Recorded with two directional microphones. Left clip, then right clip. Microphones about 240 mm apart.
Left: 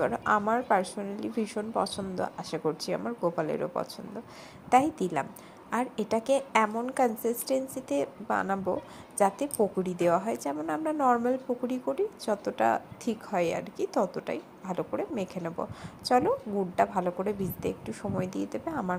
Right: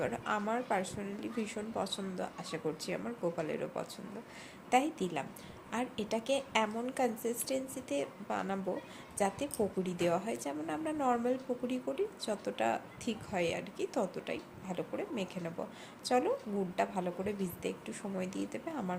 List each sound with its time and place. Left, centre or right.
0.0 s a woman's voice: centre